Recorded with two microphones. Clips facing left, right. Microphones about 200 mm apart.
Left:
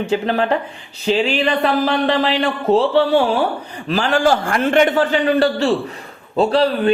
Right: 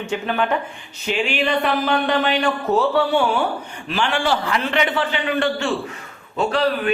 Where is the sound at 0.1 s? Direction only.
35° left (ahead or behind).